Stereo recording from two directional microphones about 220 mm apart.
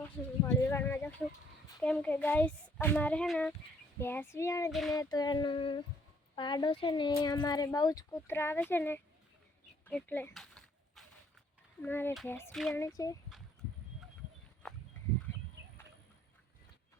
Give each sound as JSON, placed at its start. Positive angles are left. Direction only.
{"t": 0.4, "sound": "speech", "side_deg": 10}
{"t": 4.7, "sound": "speech", "side_deg": 0}
{"t": 4.9, "sound": "a sound", "side_deg": 20}
{"t": 6.3, "sound": "speech", "side_deg": 20}
{"t": 9.8, "sound": "a sound", "side_deg": 10}
{"t": 11.8, "sound": "speech", "side_deg": 10}
{"t": 12.1, "sound": "speech", "side_deg": 0}
{"t": 12.8, "sound": "speech", "side_deg": 15}